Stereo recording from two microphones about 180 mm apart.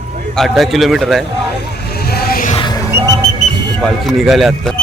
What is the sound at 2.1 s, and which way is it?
Music, 55° left (ahead or behind).